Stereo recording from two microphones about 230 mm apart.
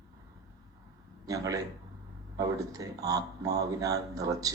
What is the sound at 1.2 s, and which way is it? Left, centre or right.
A man's voice, centre.